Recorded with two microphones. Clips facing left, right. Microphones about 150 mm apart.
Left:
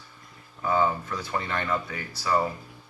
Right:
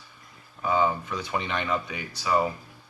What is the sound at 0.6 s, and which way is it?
Speech, 15° right (ahead or behind).